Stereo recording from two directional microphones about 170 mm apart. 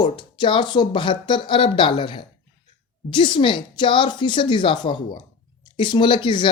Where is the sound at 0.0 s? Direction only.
25° left (ahead or behind).